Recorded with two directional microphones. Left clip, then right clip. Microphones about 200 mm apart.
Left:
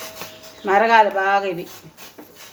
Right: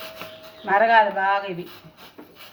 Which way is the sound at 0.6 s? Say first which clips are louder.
Left 3 dB; 45° left (ahead or behind).